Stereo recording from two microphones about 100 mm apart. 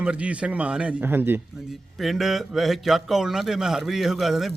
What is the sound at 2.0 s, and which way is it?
A man's voice, centre (ahead or behind).